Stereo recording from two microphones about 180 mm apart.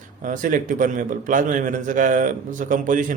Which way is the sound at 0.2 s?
50° right (ahead or behind).